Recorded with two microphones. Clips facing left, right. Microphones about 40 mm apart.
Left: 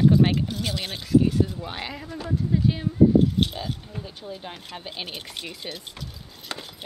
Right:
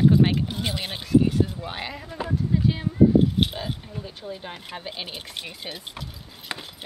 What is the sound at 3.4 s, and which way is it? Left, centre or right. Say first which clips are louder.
Speech: even; centre.